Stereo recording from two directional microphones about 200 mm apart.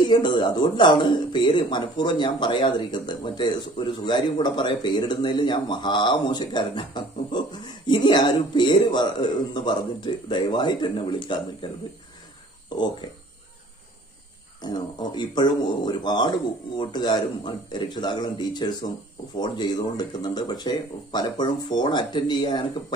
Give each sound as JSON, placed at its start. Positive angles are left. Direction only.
{"t": 0.1, "sound": "speech", "side_deg": 25}
{"t": 14.6, "sound": "speech", "side_deg": 20}